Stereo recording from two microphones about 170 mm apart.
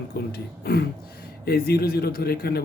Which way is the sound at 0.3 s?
70° left (ahead or behind).